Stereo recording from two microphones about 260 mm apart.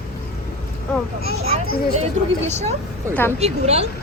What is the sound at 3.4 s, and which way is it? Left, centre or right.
Speech, right.